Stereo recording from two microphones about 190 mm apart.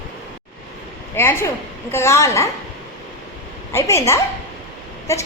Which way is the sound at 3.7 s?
15° left (ahead or behind).